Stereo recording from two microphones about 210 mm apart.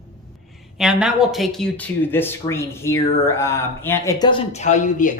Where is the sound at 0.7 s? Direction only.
Centre (ahead or behind).